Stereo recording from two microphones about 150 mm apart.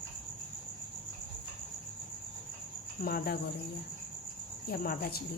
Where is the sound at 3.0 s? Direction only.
90° left.